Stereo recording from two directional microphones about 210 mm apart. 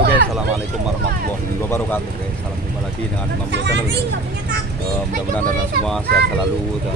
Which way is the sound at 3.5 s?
55° right (ahead or behind).